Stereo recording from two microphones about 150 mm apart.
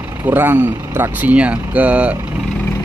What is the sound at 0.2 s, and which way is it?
Speech, 15° right (ahead or behind).